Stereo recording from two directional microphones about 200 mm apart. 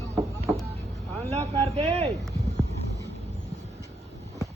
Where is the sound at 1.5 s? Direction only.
30° right (ahead or behind).